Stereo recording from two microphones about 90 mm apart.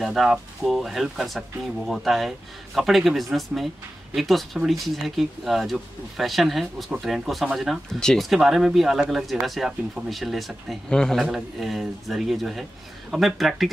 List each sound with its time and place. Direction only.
0.0 s speech: centre (ahead or behind)